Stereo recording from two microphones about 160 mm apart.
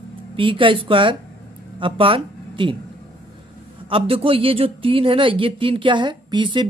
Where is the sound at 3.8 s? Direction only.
35° right (ahead or behind).